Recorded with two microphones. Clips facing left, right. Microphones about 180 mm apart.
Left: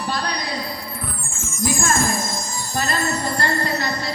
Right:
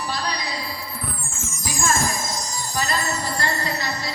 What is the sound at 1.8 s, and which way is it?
Wind chime, 55° left (ahead or behind).